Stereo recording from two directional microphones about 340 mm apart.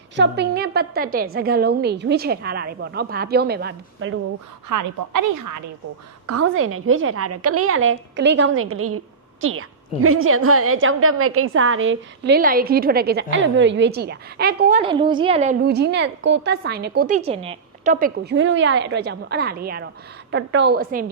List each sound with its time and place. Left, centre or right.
0.2 s a woman's voice: right
4.7 s a woman's voice: right
6.2 s a woman's voice: right